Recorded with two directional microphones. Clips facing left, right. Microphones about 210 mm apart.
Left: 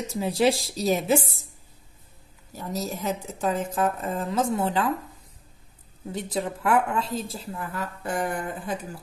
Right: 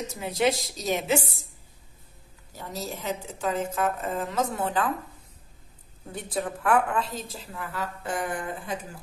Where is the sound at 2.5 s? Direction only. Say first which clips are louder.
Left 4 dB; 40° left (ahead or behind).